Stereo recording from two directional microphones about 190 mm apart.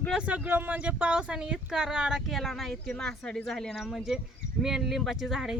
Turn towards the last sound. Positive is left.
turn(degrees=0)  # may be behind; listen again after turning